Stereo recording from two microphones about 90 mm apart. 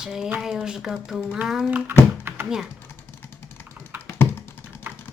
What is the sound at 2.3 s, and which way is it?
Typing, 25° right (ahead or behind).